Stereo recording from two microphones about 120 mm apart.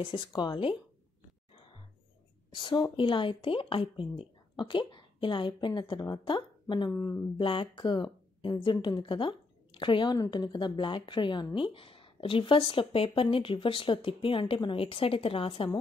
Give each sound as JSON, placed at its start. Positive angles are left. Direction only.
{"t": 0.0, "sound": "speech", "side_deg": 40}
{"t": 2.5, "sound": "speech", "side_deg": 40}
{"t": 6.9, "sound": "speech", "side_deg": 20}
{"t": 7.3, "sound": "speech", "side_deg": 45}